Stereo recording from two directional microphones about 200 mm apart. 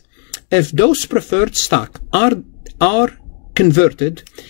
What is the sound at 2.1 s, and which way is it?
Speech, 5° left (ahead or behind).